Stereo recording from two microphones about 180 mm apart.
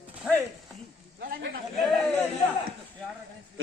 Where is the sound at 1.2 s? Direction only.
60° right (ahead or behind).